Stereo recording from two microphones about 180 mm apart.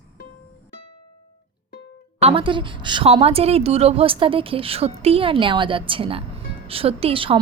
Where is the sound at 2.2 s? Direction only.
30° right (ahead or behind).